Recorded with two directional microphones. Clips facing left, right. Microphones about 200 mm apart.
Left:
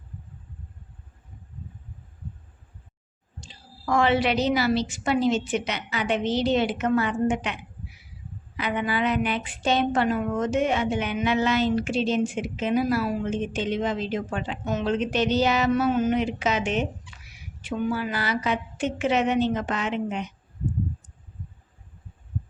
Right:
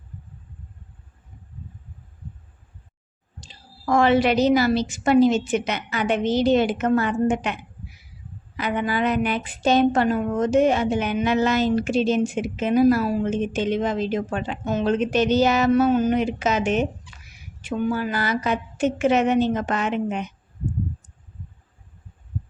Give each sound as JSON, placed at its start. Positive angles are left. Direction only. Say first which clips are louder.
{"t": 3.4, "sound": "a woman's voice", "louder": "right 4 dB", "side_deg": -40}